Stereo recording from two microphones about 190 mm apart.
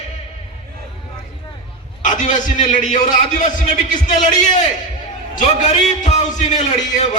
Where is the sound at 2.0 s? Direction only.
40° left (ahead or behind).